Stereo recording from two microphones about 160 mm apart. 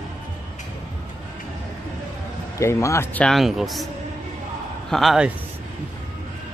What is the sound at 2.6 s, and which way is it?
Speech, 20° left (ahead or behind).